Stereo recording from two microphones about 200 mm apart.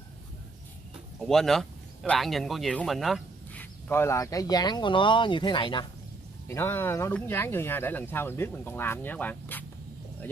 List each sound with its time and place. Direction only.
1.2 s speech: centre (ahead or behind)
3.9 s speech: 15° left (ahead or behind)
6.4 s speech: 10° left (ahead or behind)